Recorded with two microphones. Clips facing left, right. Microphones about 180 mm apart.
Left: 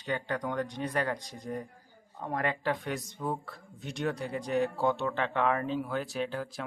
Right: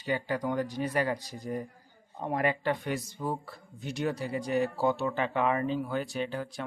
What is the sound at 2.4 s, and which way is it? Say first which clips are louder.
Speech: right 2 dB; 5° right (ahead or behind).